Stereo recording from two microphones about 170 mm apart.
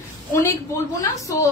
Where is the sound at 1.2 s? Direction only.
20° left (ahead or behind).